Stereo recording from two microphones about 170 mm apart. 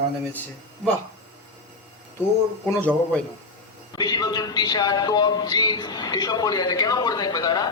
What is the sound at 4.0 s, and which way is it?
A man's voice, 20° left (ahead or behind).